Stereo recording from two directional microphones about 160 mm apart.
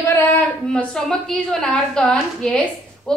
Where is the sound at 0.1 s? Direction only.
15° left (ahead or behind).